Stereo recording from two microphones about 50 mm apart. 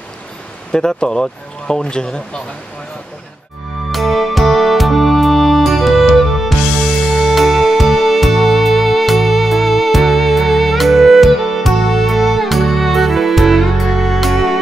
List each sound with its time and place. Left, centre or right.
0.7 s speech: centre
3.9 s music: centre